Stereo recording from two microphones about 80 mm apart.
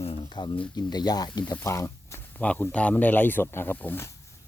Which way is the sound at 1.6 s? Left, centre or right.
Left.